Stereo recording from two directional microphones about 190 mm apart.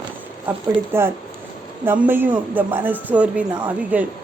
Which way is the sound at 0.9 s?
10° right (ahead or behind).